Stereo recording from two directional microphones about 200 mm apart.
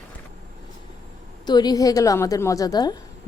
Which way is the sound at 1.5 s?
20° left (ahead or behind).